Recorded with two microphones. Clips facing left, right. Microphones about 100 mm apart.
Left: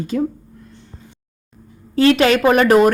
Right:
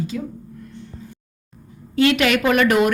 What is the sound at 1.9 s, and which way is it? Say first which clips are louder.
Speech: left 4 dB; 35° left (ahead or behind).